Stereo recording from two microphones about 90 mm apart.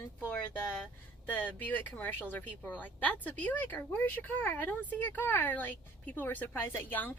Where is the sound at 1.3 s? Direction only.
20° left (ahead or behind).